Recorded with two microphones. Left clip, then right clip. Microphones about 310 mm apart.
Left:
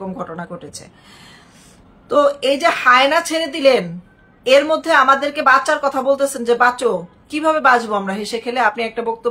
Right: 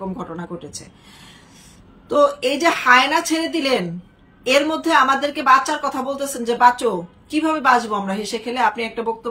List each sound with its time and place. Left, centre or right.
0.2 s a woman's voice: centre
2.0 s a woman's voice: centre